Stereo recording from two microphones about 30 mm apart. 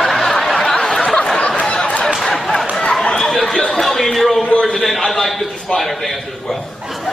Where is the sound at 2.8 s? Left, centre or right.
Left.